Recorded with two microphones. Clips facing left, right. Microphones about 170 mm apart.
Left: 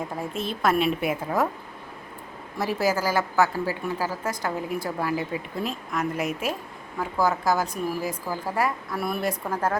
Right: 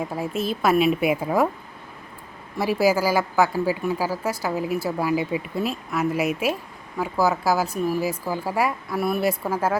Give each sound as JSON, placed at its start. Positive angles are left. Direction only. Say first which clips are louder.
{"t": 0.2, "sound": "a woman's voice", "louder": "right 3 dB", "side_deg": -5}
{"t": 2.6, "sound": "a woman's voice", "louder": "right 4 dB", "side_deg": -10}